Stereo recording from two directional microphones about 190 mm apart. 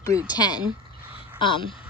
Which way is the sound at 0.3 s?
20° left (ahead or behind).